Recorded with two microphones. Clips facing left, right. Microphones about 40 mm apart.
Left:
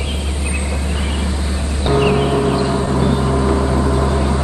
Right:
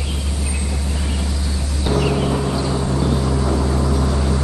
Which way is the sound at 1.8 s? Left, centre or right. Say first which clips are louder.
Left 4 dB; left.